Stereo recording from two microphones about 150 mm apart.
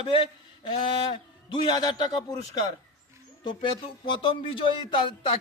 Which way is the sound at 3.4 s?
35° left (ahead or behind).